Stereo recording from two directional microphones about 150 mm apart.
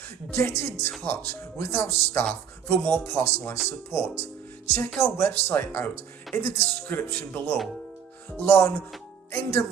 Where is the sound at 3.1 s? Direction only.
15° left (ahead or behind).